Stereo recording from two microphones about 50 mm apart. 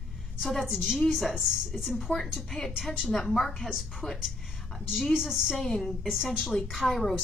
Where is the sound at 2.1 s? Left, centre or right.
Left.